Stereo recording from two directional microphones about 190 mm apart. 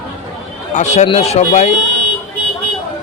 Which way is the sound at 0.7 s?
40° left (ahead or behind).